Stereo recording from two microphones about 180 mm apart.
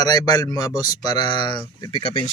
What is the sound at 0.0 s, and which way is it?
Speech, 20° left (ahead or behind).